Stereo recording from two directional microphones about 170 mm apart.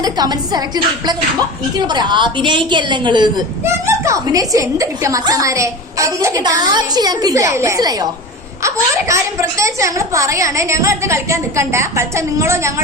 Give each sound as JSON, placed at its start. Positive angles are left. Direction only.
{"t": 0.0, "sound": "a woman's voice", "side_deg": -25}
{"t": 3.6, "sound": "a woman's voice", "side_deg": -15}